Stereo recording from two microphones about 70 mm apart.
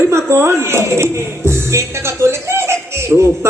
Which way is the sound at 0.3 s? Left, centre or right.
Right.